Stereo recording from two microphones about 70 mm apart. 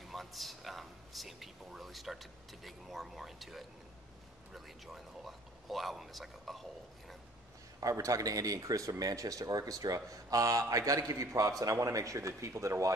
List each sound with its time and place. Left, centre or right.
0.0 s a man's voice: centre
7.8 s speech: right